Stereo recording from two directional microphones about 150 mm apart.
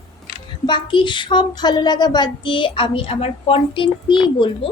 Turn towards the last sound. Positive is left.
turn(degrees=35)  # may be behind; listen again after turning